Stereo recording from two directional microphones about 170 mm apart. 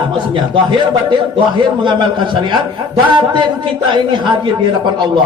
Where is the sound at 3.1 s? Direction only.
25° right (ahead or behind).